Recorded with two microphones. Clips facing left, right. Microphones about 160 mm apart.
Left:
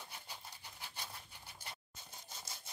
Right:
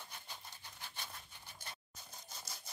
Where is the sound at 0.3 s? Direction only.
10° left (ahead or behind).